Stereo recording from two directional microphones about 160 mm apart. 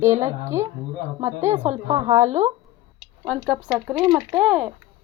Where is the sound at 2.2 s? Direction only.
45° right (ahead or behind).